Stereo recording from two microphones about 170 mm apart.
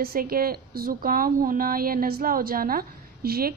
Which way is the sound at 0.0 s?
60° right (ahead or behind).